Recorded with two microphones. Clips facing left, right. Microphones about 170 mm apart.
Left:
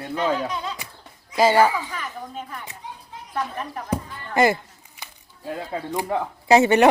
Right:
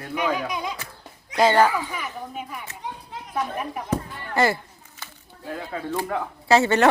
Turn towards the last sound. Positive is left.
turn(degrees=15)  # may be behind; listen again after turning